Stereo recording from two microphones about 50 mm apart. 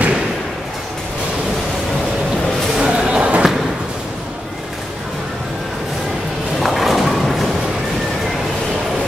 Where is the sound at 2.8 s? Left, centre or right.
Centre.